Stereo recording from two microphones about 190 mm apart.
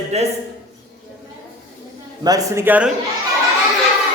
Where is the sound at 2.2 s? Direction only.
15° right (ahead or behind).